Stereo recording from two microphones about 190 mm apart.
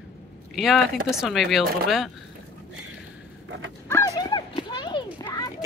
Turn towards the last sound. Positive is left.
turn(degrees=20)  # may be behind; listen again after turning